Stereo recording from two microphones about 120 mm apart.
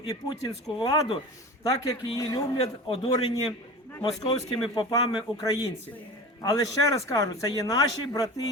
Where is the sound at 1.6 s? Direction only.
30° left (ahead or behind); by 3.3 s 50° left (ahead or behind).